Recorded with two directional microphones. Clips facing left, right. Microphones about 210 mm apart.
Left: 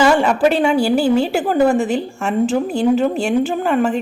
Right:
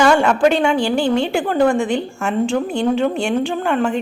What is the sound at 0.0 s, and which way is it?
A woman's voice, 5° left (ahead or behind).